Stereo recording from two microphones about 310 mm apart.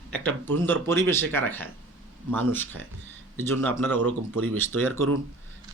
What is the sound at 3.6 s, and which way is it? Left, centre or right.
Speech, centre.